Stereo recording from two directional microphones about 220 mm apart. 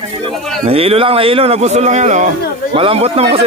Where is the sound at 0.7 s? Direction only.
25° right (ahead or behind).